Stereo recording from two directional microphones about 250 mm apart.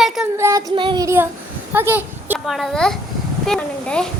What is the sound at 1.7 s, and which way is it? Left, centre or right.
A child's voice, centre.